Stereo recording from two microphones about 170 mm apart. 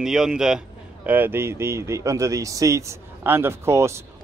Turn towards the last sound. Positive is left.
turn(degrees=-15)  # may be behind; listen again after turning